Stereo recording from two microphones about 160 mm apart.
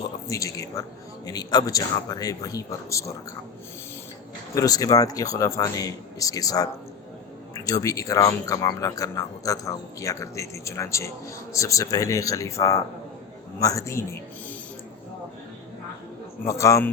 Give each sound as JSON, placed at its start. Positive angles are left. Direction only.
{"t": 0.3, "sound": "speech", "side_deg": 20}
{"t": 4.5, "sound": "speech", "side_deg": 20}
{"t": 16.5, "sound": "speech", "side_deg": 20}